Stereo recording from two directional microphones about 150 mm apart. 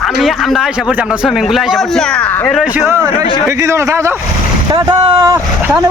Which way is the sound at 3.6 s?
20° right (ahead or behind).